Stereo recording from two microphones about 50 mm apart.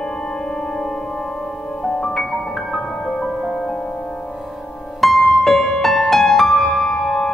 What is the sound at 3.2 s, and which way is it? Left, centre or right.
Music, centre.